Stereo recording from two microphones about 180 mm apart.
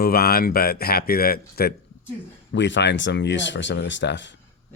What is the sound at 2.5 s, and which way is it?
Speech, 80° left.